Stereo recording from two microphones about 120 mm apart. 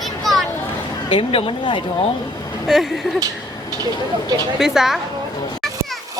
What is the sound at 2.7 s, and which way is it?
Speech, 5° right (ahead or behind).